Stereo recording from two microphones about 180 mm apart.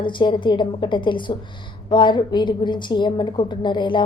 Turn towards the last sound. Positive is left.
turn(degrees=25)  # may be behind; listen again after turning